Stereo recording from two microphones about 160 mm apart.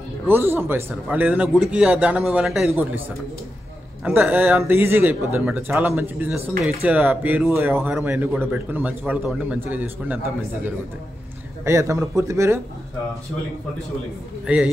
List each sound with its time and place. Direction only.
0.3 s speech: 15° right (ahead or behind)
2.7 s speech: 15° right (ahead or behind)
4.0 s speech: 10° right (ahead or behind)
11.6 s speech: 20° right (ahead or behind)
14.4 s speech: 5° right (ahead or behind)